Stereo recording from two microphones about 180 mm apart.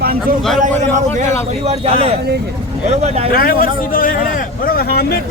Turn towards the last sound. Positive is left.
turn(degrees=60)  # may be behind; listen again after turning